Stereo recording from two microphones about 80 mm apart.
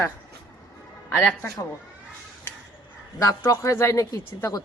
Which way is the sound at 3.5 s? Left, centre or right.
Left.